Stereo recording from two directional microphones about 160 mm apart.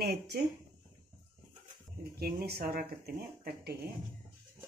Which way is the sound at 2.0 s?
75° right (ahead or behind).